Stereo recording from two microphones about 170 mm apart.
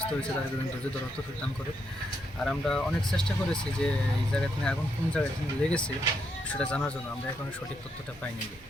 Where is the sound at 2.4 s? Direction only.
5° left (ahead or behind).